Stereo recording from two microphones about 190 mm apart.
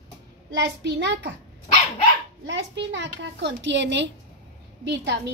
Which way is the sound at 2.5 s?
70° right (ahead or behind).